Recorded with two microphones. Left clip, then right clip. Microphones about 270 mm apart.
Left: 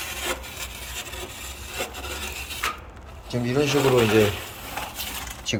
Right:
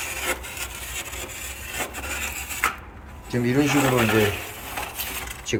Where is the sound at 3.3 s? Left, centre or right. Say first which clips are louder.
Right 1 dB; centre.